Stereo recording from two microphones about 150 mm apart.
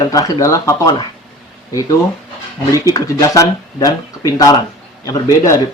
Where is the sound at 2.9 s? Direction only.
25° left (ahead or behind).